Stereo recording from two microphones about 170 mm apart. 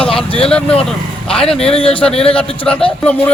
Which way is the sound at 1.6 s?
35° left (ahead or behind).